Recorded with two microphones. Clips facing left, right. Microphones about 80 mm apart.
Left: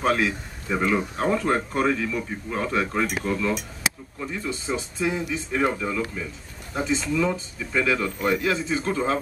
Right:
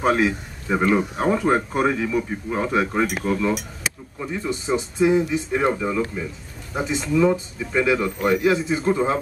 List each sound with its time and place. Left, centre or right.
0.0 s a man's voice: centre